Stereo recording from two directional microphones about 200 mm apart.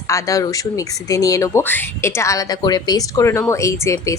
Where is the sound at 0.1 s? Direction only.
15° left (ahead or behind).